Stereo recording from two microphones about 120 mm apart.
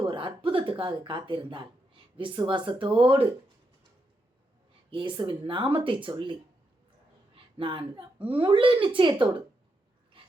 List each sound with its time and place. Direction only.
0.0 s speech: 45° right (ahead or behind)
4.9 s speech: 45° right (ahead or behind)
7.3 s a woman's voice: 45° right (ahead or behind)